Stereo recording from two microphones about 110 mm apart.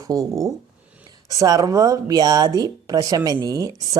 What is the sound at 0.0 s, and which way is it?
Speech, 35° right (ahead or behind).